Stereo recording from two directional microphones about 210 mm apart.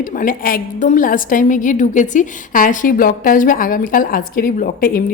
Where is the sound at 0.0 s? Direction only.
40° left (ahead or behind).